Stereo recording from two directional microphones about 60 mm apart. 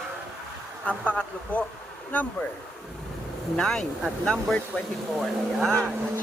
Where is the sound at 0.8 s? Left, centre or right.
Left.